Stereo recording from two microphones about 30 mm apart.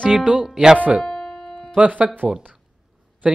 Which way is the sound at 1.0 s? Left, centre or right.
Centre.